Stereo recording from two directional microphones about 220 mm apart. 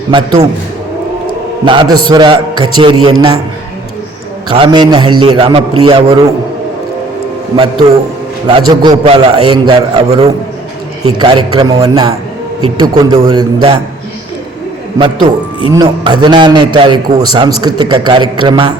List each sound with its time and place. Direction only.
0.1 s a man's voice: 20° right (ahead or behind)
1.6 s a man's voice: 20° right (ahead or behind)
4.4 s a man's voice: 20° right (ahead or behind)
7.5 s a man's voice: 25° right (ahead or behind)
14.9 s a man's voice: 20° right (ahead or behind)